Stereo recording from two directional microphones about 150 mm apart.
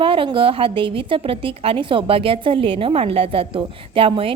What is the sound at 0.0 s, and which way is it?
A woman's voice, 35° right (ahead or behind).